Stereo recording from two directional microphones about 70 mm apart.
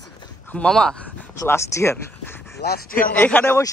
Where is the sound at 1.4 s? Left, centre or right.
Left.